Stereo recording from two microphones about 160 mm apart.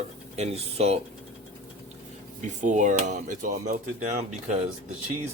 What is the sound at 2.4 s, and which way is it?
Speech, 50° right (ahead or behind).